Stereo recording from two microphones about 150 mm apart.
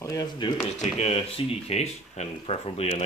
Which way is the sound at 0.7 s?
45° left (ahead or behind).